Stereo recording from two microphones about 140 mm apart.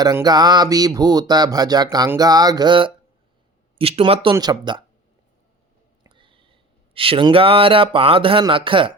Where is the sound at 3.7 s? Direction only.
40° right (ahead or behind).